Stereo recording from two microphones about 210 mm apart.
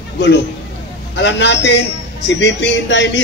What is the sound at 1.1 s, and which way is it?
A man's voice, 55° left (ahead or behind).